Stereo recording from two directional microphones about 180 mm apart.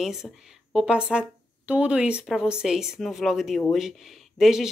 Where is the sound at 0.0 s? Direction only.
Centre (ahead or behind).